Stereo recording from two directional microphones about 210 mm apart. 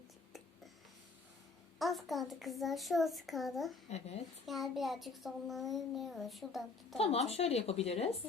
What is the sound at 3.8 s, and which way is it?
Speech, 30° left (ahead or behind).